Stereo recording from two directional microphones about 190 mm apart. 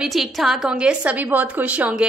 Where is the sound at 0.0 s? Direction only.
Centre (ahead or behind).